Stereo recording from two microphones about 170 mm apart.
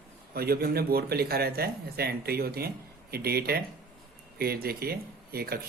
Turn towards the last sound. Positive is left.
turn(degrees=-65)  # may be behind; listen again after turning